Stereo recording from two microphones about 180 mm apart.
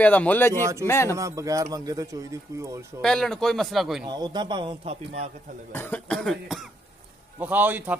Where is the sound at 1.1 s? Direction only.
15° right (ahead or behind).